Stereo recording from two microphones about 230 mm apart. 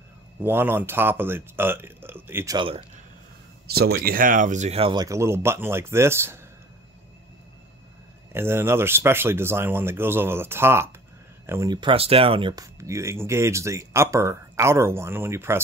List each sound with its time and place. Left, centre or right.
0.4 s speech: centre
3.6 s speech: right; by 6.4 s centre
8.3 s speech: centre